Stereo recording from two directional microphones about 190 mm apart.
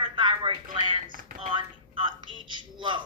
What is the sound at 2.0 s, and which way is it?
A woman's voice, 25° right (ahead or behind).